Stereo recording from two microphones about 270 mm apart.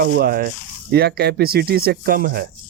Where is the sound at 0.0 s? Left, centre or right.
Right.